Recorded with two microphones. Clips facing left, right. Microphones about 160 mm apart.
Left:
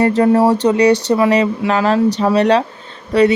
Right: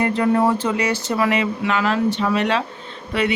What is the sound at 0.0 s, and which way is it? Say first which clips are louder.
Speech: left 6 dB; 40° left (ahead or behind).